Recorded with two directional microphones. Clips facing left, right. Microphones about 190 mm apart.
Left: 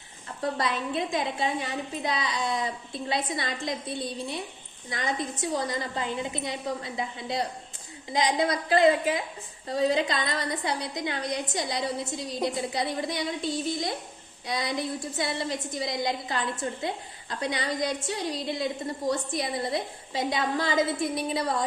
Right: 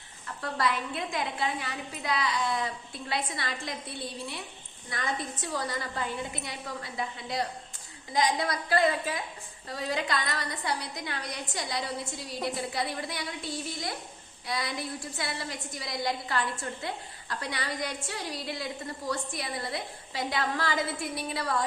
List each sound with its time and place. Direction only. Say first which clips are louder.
0.5 s a woman's voice: right 1 dB; 20° left (ahead or behind)
4.9 s a woman's voice: left 3 dB; 20° left (ahead or behind)